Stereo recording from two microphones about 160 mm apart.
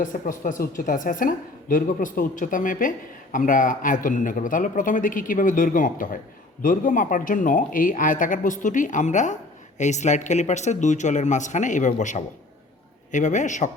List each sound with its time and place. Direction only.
0.0 s a woman's voice: 55° left (ahead or behind)